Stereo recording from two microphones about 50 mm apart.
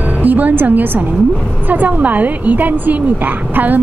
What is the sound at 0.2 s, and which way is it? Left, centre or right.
A woman's voice, right.